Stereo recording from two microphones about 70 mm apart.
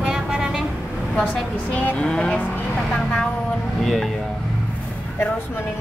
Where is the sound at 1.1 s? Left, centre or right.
Left.